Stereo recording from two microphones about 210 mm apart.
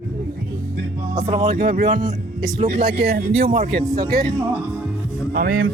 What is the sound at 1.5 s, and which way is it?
Speech, 45° right (ahead or behind).